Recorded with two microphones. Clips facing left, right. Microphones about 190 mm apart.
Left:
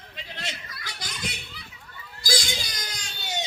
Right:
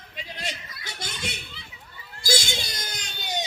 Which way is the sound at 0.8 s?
25° right (ahead or behind).